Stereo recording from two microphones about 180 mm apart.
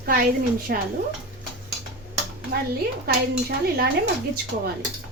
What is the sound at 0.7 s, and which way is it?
Speech, 60° right (ahead or behind).